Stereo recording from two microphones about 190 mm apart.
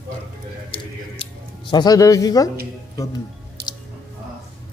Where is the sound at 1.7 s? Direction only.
20° left (ahead or behind).